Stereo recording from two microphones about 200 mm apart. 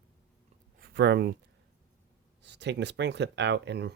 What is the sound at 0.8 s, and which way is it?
Speech, 55° right (ahead or behind).